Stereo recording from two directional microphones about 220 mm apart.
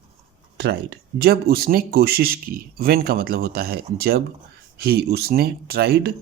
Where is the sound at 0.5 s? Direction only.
50° right (ahead or behind).